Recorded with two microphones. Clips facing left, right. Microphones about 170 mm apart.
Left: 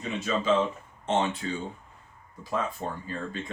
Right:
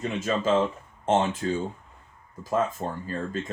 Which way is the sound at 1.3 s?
45° right (ahead or behind).